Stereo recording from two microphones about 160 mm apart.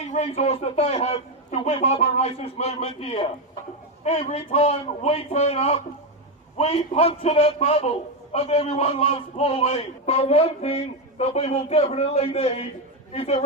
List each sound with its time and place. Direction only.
0.1 s a man's voice: 40° left (ahead or behind)